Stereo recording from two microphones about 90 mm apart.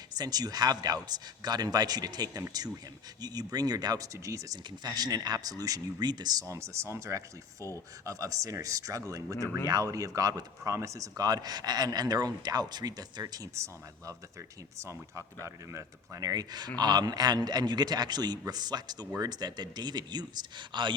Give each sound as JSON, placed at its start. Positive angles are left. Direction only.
{"t": 0.2, "sound": "speech", "side_deg": -45}
{"t": 6.5, "sound": "speech", "side_deg": -30}
{"t": 14.8, "sound": "speech", "side_deg": -35}